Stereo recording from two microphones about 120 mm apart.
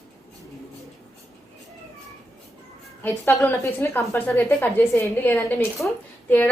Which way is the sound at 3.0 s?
20° left (ahead or behind).